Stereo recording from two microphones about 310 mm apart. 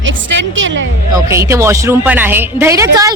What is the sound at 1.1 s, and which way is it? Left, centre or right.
Speech, centre.